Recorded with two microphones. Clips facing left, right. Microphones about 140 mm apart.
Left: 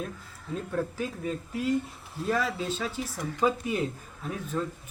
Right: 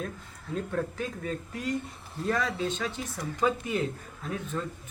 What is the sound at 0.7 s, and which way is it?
Speech, 5° left (ahead or behind).